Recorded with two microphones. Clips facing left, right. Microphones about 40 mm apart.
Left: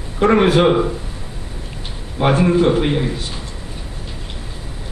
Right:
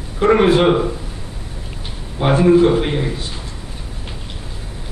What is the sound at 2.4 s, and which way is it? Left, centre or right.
Speech, centre.